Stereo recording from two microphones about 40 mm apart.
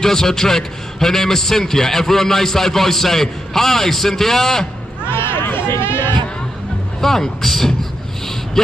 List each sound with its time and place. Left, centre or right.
0.0 s a man's voice: centre
5.1 s a sound: left
7.0 s a man's voice: centre